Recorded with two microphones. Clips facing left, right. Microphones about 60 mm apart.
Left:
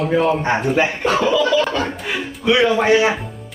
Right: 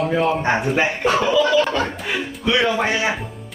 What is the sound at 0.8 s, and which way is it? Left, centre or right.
Speech, right.